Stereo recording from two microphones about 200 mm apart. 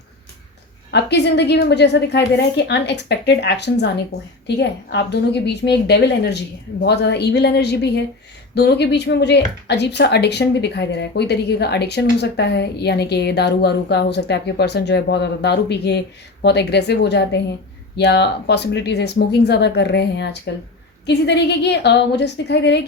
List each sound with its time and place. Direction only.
0.9 s speech: 60° left (ahead or behind)